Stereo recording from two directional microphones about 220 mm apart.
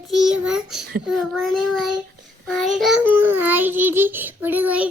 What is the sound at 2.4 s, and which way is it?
Child singing, centre (ahead or behind).